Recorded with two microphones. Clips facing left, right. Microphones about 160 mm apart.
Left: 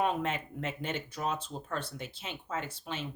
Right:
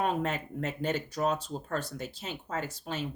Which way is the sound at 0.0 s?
40° right (ahead or behind).